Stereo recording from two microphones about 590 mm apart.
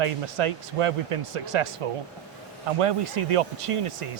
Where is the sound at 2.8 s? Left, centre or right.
Right.